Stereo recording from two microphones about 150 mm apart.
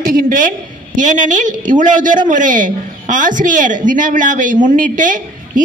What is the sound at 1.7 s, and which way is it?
A man's voice, 60° right (ahead or behind).